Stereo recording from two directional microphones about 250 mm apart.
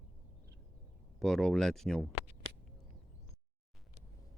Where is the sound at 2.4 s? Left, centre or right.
Right.